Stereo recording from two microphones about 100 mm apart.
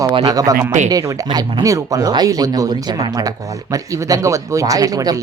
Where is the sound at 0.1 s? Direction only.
45° right (ahead or behind).